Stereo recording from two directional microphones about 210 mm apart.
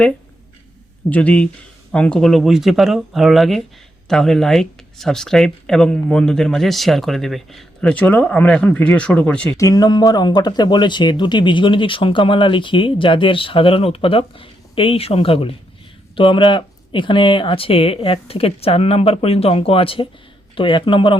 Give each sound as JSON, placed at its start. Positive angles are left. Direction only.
{"t": 1.1, "sound": "speech", "side_deg": 5}